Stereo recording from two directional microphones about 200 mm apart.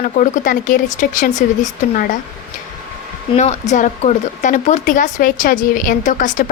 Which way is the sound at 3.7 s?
40° left (ahead or behind).